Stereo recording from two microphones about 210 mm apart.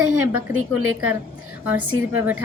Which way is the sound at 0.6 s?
90° right.